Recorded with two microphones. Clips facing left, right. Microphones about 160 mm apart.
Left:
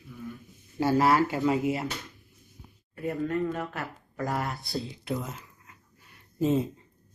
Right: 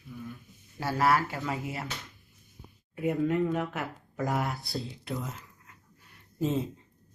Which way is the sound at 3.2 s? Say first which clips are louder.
Right 1 dB; 15° right (ahead or behind).